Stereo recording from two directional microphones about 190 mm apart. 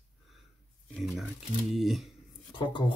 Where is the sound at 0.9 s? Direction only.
Centre (ahead or behind).